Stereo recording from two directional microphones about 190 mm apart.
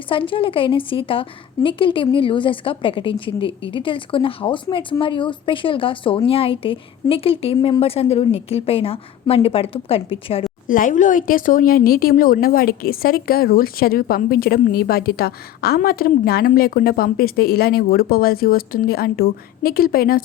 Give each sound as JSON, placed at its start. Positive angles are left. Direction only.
{"t": 0.1, "sound": "a woman's voice", "side_deg": 25}
{"t": 10.7, "sound": "speech", "side_deg": 45}